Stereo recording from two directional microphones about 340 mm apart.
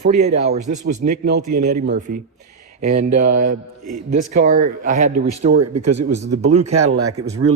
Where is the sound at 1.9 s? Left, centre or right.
Right.